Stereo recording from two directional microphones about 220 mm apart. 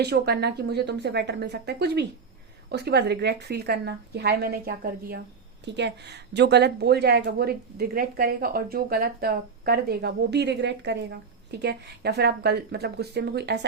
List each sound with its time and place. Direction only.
0.0 s speech: 50° right (ahead or behind)